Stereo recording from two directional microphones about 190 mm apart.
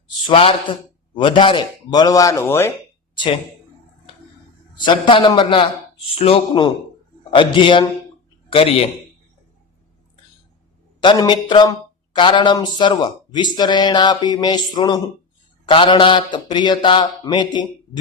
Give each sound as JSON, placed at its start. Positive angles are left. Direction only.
{"t": 0.3, "sound": "speech", "side_deg": 25}
{"t": 3.2, "sound": "speech", "side_deg": 25}
{"t": 4.8, "sound": "a man's voice", "side_deg": 25}
{"t": 11.0, "sound": "speech", "side_deg": 25}